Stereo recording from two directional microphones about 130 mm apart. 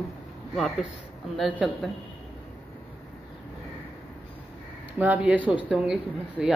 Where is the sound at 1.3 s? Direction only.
Centre (ahead or behind).